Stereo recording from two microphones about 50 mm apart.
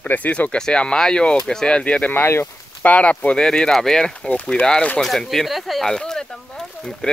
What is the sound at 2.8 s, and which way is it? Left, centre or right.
Speech, left.